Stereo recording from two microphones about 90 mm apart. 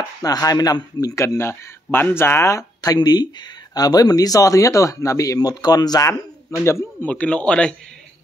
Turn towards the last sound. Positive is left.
turn(degrees=10)  # may be behind; listen again after turning